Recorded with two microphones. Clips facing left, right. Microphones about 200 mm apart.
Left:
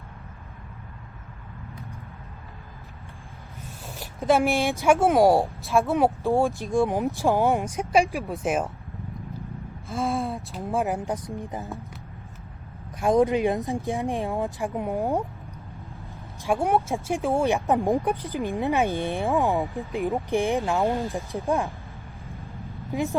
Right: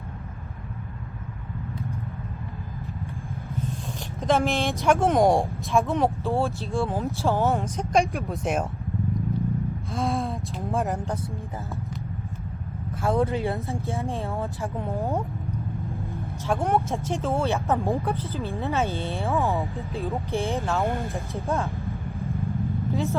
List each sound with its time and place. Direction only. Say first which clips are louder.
4.2 s speech: left 2 dB; 10° left (ahead or behind)
6.2 s speech: left 3 dB; 15° left (ahead or behind)
9.9 s a sound: left 1 dB; centre (ahead or behind)
10.8 s speech: left 1 dB; 10° left (ahead or behind)
13.0 s speech: left 4 dB; 15° left (ahead or behind)
16.5 s speech: left 1 dB; 15° left (ahead or behind)
21.8 s vehicle: right 10 dB; centre (ahead or behind)
22.9 s vehicle: left 2 dB; 15° left (ahead or behind)